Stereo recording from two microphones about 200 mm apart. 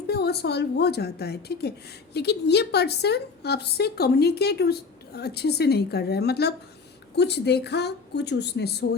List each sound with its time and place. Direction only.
0.1 s a woman's voice: 55° left (ahead or behind)